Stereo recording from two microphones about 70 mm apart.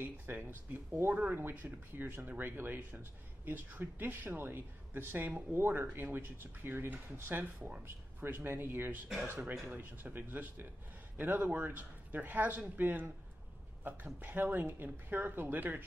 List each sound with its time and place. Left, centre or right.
0.0 s speech: right